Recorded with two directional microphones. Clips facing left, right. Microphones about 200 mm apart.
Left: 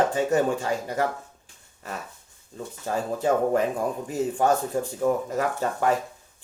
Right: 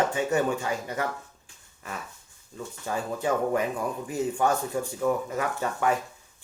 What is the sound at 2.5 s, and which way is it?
Speech, 35° left (ahead or behind).